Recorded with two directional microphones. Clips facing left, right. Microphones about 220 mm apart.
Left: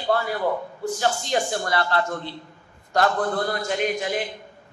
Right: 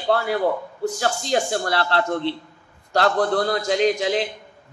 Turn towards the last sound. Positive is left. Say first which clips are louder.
# right 5 dB
turn(degrees=-90)